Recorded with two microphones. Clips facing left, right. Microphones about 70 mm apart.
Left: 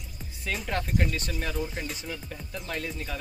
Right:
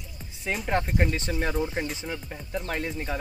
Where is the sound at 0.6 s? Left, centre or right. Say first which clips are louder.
Right 4 dB; right.